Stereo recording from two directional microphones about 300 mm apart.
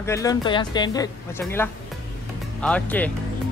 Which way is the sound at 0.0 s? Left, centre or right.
Centre.